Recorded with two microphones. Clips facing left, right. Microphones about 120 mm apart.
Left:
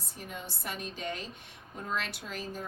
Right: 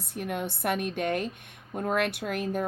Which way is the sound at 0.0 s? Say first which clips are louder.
Right 11 dB; 65° right (ahead or behind).